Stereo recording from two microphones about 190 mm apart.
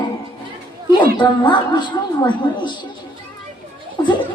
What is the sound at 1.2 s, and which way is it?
A woman's voice, 25° left (ahead or behind).